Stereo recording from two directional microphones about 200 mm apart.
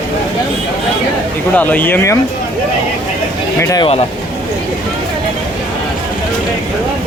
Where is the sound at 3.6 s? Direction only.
15° left (ahead or behind).